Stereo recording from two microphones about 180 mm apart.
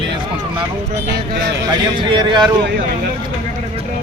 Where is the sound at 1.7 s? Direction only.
25° right (ahead or behind).